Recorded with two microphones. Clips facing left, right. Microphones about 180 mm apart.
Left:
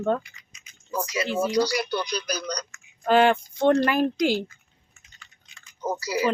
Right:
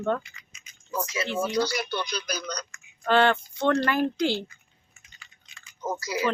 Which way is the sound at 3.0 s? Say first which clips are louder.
Left 3 dB; 10° left (ahead or behind).